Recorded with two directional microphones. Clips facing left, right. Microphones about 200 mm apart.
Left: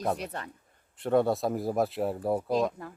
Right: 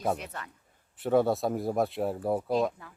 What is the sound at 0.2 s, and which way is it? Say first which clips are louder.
Speech: left 4 dB; 30° left (ahead or behind).